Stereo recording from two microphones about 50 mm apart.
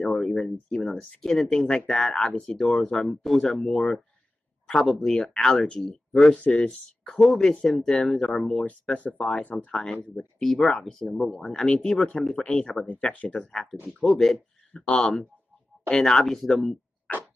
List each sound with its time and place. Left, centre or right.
0.0 s speech: centre
6.3 s speech: left
7.2 s speech: centre
8.9 s speech: left
10.4 s speech: centre
12.9 s speech: left
13.5 s speech: centre